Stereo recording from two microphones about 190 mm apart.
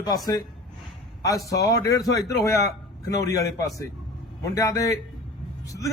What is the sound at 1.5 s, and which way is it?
A man's voice, 20° left (ahead or behind).